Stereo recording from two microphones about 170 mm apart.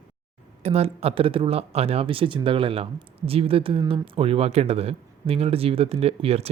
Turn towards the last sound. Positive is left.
turn(degrees=-35)  # may be behind; listen again after turning